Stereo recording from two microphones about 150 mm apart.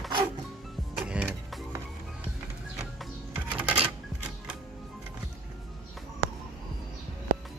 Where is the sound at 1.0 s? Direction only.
5° right (ahead or behind).